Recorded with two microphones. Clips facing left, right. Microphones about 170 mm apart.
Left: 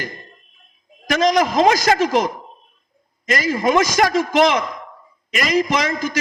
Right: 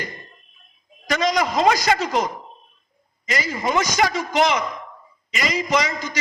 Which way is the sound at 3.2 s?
50° left (ahead or behind).